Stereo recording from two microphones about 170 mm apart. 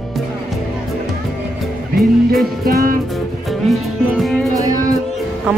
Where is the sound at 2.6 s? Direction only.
60° right (ahead or behind).